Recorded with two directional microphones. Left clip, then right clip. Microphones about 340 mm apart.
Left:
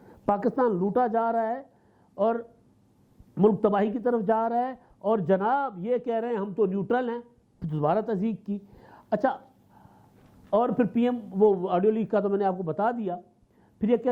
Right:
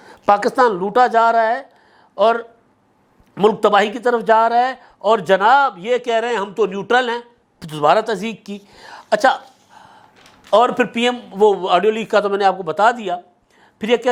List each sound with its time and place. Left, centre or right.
0.0 s a man's voice: centre